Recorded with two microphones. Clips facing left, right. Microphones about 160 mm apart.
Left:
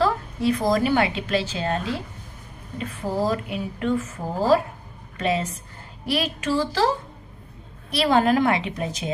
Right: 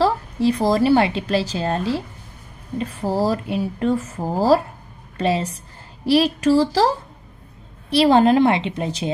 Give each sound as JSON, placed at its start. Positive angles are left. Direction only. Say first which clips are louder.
{"t": 0.0, "sound": "a woman's voice", "louder": "right 4 dB", "side_deg": -30}
{"t": 7.9, "sound": "a woman's voice", "louder": "right 5 dB", "side_deg": -30}